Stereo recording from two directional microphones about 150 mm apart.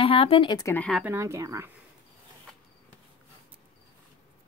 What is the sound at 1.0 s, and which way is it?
Speech, 15° right (ahead or behind).